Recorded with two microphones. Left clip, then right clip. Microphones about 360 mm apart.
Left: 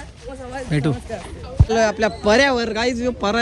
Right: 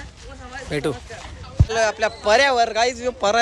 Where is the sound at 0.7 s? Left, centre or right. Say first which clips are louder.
Even; centre.